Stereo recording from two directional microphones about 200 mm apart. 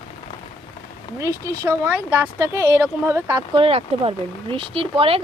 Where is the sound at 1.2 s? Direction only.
15° right (ahead or behind).